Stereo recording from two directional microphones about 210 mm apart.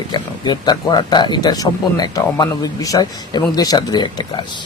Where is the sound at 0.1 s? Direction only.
20° left (ahead or behind).